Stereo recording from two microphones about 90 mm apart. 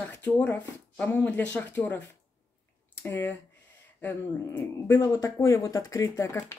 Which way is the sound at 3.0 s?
20° left (ahead or behind).